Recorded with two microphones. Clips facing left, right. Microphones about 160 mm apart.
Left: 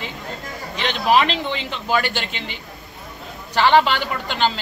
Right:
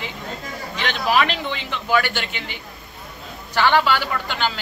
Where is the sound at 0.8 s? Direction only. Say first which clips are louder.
Left 2 dB; 20° left (ahead or behind).